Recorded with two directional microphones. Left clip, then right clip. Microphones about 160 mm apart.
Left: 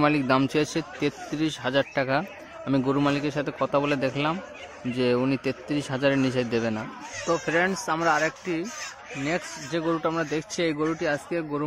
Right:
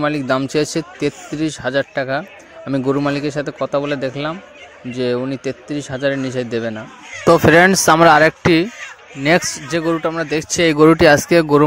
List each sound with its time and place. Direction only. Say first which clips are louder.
0.0 s speech: right 4 dB; 15° right (ahead or behind)
2.7 s a man's voice: right 6 dB; 30° right (ahead or behind)
7.2 s speech: right 14 dB; 70° right (ahead or behind)
9.7 s a man's voice: right 5 dB; 35° right (ahead or behind)
10.8 s speech: right 17 dB; 60° right (ahead or behind)